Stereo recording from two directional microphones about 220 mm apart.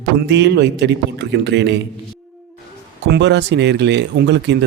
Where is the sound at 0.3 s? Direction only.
50° right (ahead or behind).